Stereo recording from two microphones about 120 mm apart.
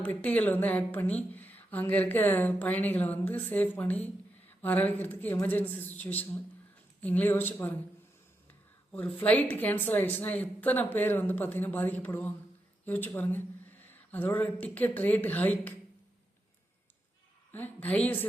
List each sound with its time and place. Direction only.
0.0 s speech: 10° left (ahead or behind)
17.5 s speech: 15° left (ahead or behind)